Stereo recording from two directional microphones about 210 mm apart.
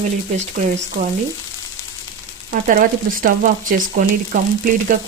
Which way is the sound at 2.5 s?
40° right (ahead or behind).